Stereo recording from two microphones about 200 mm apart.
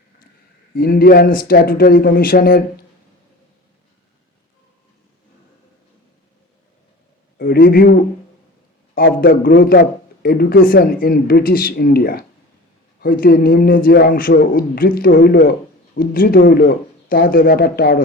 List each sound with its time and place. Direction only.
0.8 s speech: 50° left (ahead or behind)
7.3 s a man's voice: 50° left (ahead or behind)
9.2 s speech: 45° left (ahead or behind)